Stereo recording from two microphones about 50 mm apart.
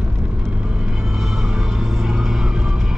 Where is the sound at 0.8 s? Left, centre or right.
Centre.